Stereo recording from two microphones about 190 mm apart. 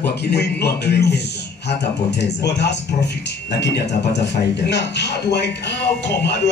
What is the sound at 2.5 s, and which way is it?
Speech, 65° left (ahead or behind).